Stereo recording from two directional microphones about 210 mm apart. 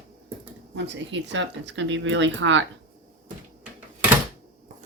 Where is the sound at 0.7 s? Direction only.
60° right (ahead or behind).